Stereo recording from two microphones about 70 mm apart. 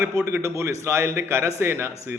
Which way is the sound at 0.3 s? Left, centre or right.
Right.